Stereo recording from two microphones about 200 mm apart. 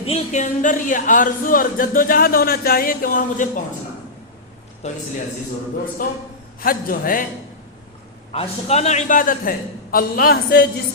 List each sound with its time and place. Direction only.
0.0 s speech: 35° left (ahead or behind)
4.8 s a man's voice: 35° left (ahead or behind)
6.0 s speech: 45° left (ahead or behind)
8.3 s speech: 30° left (ahead or behind); by 10.7 s 50° left (ahead or behind)